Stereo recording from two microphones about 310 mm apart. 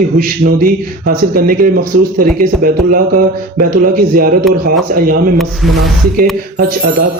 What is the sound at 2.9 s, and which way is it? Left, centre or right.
A man's voice, right.